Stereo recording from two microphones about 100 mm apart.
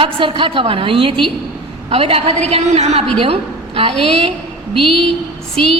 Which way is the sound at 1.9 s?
75° right (ahead or behind).